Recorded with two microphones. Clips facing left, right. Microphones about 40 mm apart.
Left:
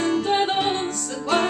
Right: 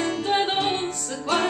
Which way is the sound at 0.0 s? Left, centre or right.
Centre.